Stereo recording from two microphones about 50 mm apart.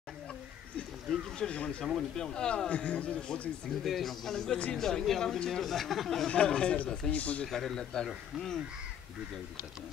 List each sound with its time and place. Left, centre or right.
1.1 s a sound: centre
1.4 s a man's voice: left
2.7 s a man's voice: left
3.8 s speech: centre
6.2 s a man's voice: centre
7.4 s speech: centre